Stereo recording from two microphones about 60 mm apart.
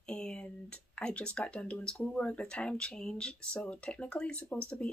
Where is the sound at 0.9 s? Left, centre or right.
Centre.